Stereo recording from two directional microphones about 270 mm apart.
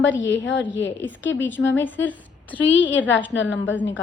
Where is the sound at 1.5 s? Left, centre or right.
Left.